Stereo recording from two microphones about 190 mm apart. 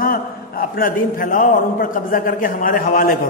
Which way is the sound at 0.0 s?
50° left (ahead or behind).